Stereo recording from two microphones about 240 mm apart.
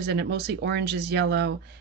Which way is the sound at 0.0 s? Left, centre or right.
Right.